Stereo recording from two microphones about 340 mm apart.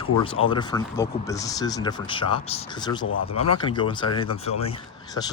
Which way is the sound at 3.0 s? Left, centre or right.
Left.